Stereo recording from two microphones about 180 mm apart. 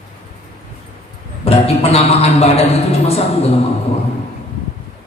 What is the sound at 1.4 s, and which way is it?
Speech, 35° left (ahead or behind).